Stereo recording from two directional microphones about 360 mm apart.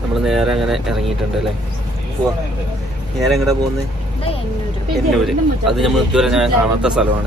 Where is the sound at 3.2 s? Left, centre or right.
Centre.